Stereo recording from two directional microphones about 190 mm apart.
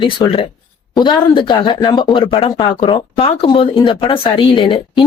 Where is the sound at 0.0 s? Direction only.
25° left (ahead or behind).